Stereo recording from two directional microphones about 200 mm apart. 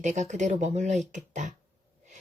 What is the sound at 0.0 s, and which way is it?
Speech, 35° right (ahead or behind).